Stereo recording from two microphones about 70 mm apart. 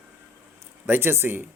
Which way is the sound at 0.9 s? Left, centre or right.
Right.